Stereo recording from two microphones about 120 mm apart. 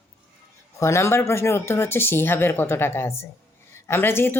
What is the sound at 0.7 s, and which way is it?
Speech, 25° left (ahead or behind).